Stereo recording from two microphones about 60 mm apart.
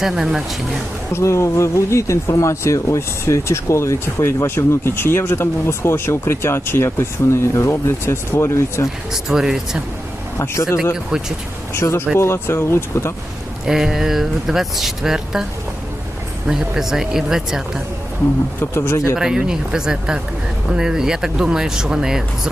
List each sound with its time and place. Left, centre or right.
0.0 s speech: centre
1.1 s speech: left
9.1 s speech: centre
10.5 s speech: left
13.7 s speech: centre
16.5 s speech: centre
18.6 s speech: left
19.1 s speech: centre